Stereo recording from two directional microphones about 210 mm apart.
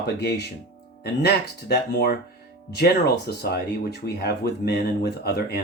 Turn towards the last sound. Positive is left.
turn(degrees=50)  # may be behind; listen again after turning